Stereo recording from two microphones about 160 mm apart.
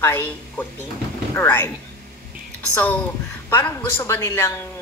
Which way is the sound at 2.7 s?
10° left (ahead or behind).